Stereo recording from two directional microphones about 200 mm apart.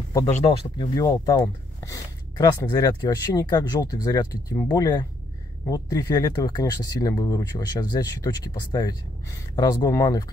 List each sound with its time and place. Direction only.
0.3 s speech: 25° left (ahead or behind)